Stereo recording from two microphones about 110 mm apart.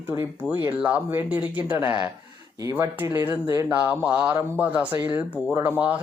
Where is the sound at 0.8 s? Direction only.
15° right (ahead or behind).